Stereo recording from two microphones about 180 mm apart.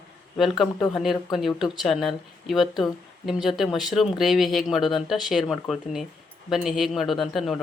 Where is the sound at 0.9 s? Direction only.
Centre (ahead or behind).